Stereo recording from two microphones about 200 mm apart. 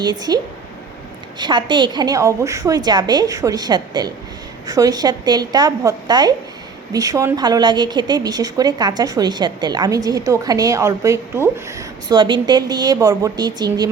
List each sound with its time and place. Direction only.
0.0 s a woman's voice: 20° right (ahead or behind)
1.4 s a woman's voice: 25° right (ahead or behind)